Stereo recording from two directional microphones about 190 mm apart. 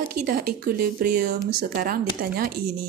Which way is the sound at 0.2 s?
50° right (ahead or behind).